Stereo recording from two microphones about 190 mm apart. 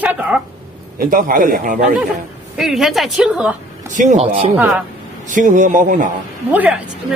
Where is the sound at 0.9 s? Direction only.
45° right (ahead or behind).